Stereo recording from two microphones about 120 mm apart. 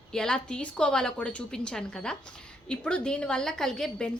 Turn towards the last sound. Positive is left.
turn(degrees=5)  # may be behind; listen again after turning